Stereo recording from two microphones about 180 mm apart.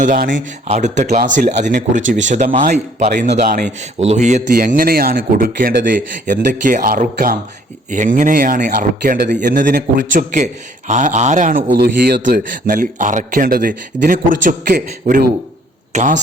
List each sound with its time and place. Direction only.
0.0 s speech: 45° right (ahead or behind)
2.0 s speech: 90° right
2.3 s a man's voice: 40° right (ahead or behind)
4.5 s speech: 50° right (ahead or behind)
11.8 s speech: 60° right (ahead or behind)